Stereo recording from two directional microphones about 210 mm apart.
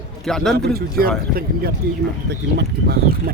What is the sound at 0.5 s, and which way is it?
Speech, 50° right (ahead or behind).